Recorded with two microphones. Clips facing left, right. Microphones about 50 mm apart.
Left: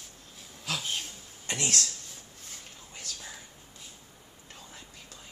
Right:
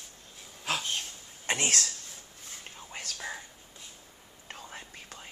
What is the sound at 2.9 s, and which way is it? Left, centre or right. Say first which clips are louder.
Whispering: right 6 dB; right.